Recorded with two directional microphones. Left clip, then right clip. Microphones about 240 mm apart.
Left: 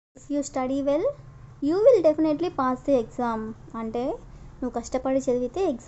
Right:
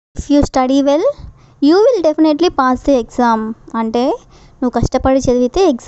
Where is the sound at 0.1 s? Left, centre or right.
Right.